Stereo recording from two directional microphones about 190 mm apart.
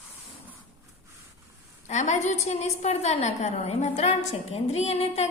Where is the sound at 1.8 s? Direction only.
40° left (ahead or behind).